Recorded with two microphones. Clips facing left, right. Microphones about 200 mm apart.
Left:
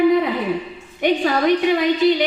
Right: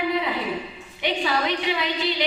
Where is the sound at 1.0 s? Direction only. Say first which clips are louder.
Left 7 dB; 45° left (ahead or behind).